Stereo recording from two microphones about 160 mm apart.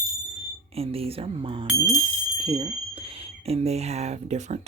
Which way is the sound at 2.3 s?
30° right (ahead or behind).